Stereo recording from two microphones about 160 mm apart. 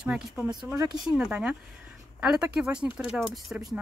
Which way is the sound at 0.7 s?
25° right (ahead or behind).